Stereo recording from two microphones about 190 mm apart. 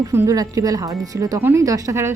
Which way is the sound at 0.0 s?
15° right (ahead or behind).